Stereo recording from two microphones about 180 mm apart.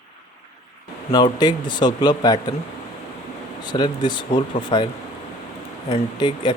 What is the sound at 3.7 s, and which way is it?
A man's voice, 25° left (ahead or behind).